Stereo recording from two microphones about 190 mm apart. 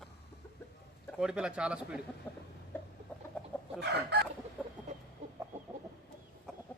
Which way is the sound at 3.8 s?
60° right (ahead or behind).